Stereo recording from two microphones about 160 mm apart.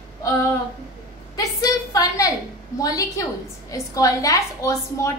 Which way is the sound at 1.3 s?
25° left (ahead or behind).